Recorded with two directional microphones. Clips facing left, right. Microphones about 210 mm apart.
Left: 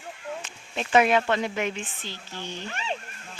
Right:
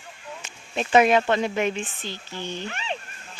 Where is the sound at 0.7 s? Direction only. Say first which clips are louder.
Right 3 dB; 20° right (ahead or behind).